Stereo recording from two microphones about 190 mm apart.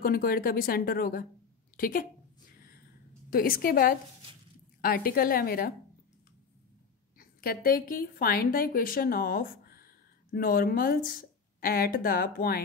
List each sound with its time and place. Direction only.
0.0 s speech: 50° left (ahead or behind)
3.3 s speech: 50° left (ahead or behind)
7.2 s a woman's voice: 50° left (ahead or behind)